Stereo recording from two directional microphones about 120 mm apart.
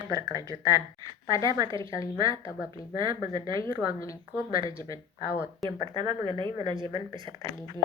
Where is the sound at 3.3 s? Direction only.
30° left (ahead or behind).